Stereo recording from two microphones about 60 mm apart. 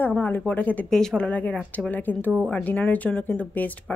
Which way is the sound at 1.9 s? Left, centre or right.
Left.